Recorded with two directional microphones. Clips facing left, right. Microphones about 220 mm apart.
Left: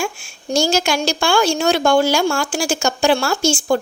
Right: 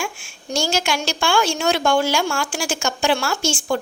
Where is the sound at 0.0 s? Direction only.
40° left (ahead or behind).